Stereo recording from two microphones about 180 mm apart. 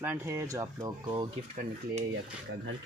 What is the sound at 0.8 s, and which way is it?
Speech, 25° right (ahead or behind).